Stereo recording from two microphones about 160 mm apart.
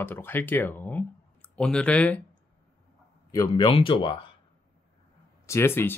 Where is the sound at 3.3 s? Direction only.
25° left (ahead or behind).